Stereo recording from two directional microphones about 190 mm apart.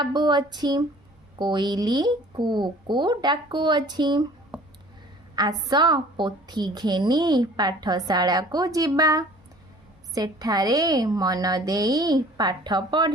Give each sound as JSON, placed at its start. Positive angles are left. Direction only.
{"t": 0.0, "sound": "a woman's voice", "side_deg": -20}
{"t": 5.4, "sound": "a woman's voice", "side_deg": -20}